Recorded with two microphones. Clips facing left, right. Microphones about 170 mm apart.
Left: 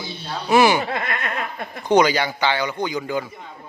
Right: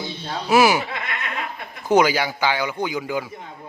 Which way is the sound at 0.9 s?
45° left (ahead or behind).